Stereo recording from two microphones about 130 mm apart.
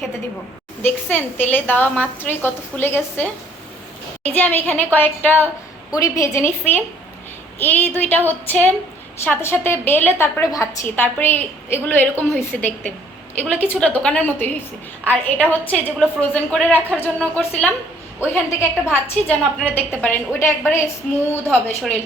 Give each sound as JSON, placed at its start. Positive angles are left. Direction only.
{"t": 0.8, "sound": "a woman's voice", "side_deg": 15}
{"t": 4.3, "sound": "a woman's voice", "side_deg": 15}
{"t": 5.9, "sound": "a woman's voice", "side_deg": 25}